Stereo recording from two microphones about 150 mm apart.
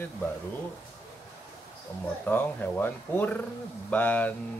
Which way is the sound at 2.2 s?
15° left (ahead or behind).